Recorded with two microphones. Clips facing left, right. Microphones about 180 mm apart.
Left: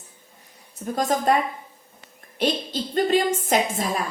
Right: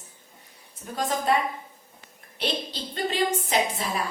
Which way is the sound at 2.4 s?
45° left (ahead or behind).